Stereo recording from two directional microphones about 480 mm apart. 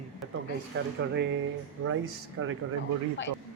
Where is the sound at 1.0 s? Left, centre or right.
Right.